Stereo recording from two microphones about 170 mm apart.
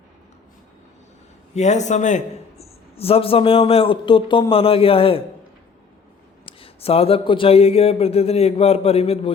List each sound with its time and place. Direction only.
1.5 s a man's voice: 45° left (ahead or behind)
6.4 s a man's voice: 35° left (ahead or behind)